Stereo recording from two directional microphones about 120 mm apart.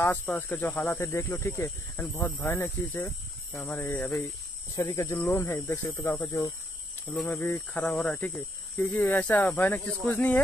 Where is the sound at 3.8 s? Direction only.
15° left (ahead or behind).